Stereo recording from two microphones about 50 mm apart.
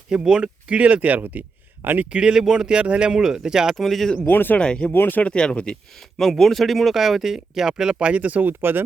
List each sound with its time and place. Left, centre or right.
0.3 s speech: centre; by 2.0 s right
2.0 s speech: centre
3.8 s speech: centre
4.3 s speech: left
4.5 s speech: left
4.9 s speech: left
5.2 s speech: left
6.1 s speech: centre; by 8.8 s right